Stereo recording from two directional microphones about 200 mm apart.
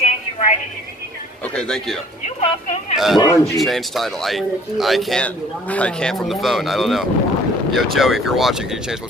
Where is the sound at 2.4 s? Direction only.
35° left (ahead or behind).